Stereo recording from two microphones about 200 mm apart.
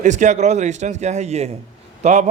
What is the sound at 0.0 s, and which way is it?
Speech, 35° right (ahead or behind).